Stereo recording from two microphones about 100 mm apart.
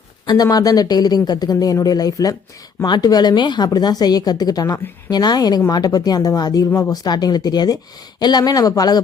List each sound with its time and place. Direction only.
0.3 s speech: 40° left (ahead or behind)